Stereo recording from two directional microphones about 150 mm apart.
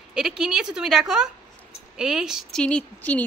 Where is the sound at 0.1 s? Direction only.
5° right (ahead or behind).